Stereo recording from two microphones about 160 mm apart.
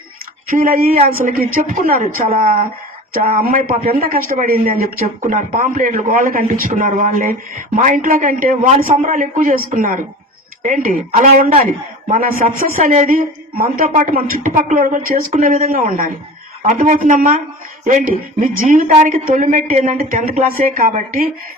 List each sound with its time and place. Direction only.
0.5 s a woman's voice: 65° right (ahead or behind)
15.3 s speech: 50° right (ahead or behind)